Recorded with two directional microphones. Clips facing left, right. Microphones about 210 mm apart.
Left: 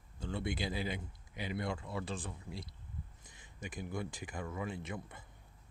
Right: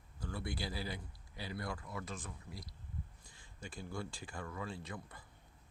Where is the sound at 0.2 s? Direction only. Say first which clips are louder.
Left 4 dB; 25° left (ahead or behind).